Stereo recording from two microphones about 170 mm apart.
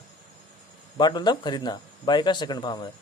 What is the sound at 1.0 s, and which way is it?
A man's voice, 25° left (ahead or behind).